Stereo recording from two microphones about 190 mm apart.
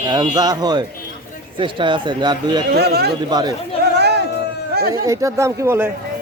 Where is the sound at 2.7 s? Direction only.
60° right (ahead or behind).